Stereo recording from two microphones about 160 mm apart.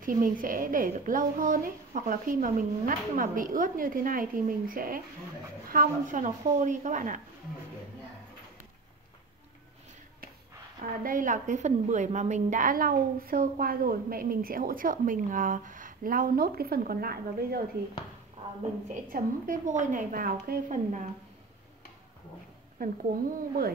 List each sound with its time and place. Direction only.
0.0 s a woman's voice: 60° right (ahead or behind)
10.8 s a woman's voice: 60° right (ahead or behind)
18.9 s a woman's voice: 60° right (ahead or behind)
22.8 s a woman's voice: 65° right (ahead or behind)